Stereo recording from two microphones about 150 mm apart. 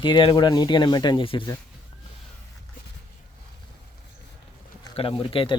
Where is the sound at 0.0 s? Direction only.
30° left (ahead or behind).